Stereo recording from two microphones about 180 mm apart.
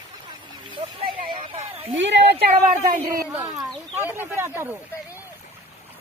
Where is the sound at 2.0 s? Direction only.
80° right.